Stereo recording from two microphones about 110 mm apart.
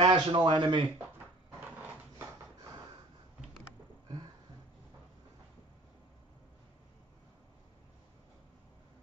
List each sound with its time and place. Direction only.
0.0 s a man's voice: 45° right (ahead or behind)